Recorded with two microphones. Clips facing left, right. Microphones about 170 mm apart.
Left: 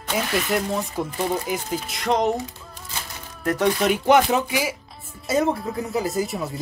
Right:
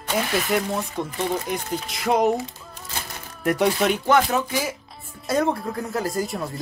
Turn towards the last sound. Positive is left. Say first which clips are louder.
# left 1 dB
turn(degrees=0)  # may be behind; listen again after turning